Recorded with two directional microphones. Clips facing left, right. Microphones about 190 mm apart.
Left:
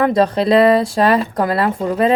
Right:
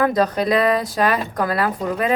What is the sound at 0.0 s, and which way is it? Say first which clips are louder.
Speech: left 4 dB; 30° left (ahead or behind).